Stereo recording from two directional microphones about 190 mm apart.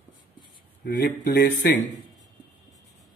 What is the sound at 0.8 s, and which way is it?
Speech, 50° left (ahead or behind).